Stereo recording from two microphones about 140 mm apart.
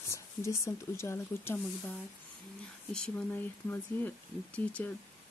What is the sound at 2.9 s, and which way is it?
Speech, 10° left (ahead or behind).